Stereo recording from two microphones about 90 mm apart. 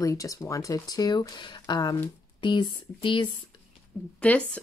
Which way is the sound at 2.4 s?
60° left (ahead or behind).